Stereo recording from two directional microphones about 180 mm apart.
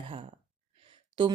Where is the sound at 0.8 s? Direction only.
30° right (ahead or behind).